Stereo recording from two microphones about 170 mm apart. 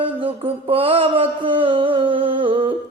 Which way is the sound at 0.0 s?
35° right (ahead or behind).